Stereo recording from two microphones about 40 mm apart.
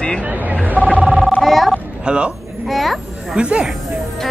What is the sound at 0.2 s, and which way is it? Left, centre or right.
Telephone dialing, right.